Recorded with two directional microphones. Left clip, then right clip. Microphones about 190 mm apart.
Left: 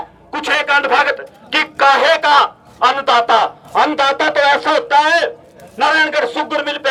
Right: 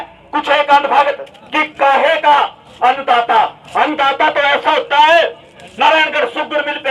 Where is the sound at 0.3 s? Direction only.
10° right (ahead or behind).